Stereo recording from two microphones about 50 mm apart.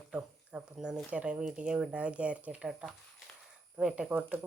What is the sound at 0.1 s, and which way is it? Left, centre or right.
Speech, right.